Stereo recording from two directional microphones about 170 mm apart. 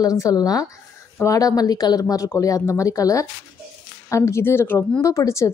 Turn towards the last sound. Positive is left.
turn(degrees=20)  # may be behind; listen again after turning